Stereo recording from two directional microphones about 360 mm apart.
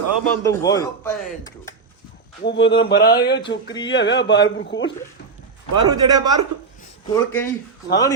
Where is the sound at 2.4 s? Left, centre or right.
Left.